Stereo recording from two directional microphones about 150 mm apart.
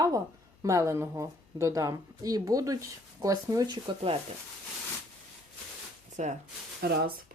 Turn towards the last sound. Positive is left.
turn(degrees=-90)